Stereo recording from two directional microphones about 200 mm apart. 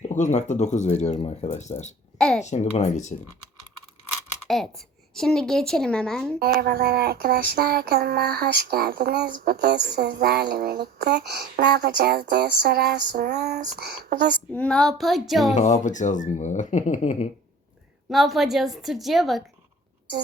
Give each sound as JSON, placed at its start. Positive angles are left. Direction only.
{"t": 0.1, "sound": "speech", "side_deg": 35}
{"t": 2.1, "sound": "a child's voice", "side_deg": 5}
{"t": 2.4, "sound": "speech", "side_deg": 35}
{"t": 4.4, "sound": "a woman's voice", "side_deg": 0}
{"t": 6.4, "sound": "child singing", "side_deg": -50}
{"t": 14.0, "sound": "speech", "side_deg": -55}
{"t": 14.5, "sound": "a woman's voice", "side_deg": 5}
{"t": 15.5, "sound": "speech", "side_deg": 35}
{"t": 18.1, "sound": "a woman's voice", "side_deg": 0}